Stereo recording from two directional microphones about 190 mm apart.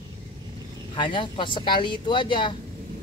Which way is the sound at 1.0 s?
25° left (ahead or behind).